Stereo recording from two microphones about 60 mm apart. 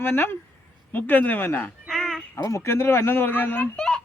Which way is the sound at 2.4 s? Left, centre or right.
Left.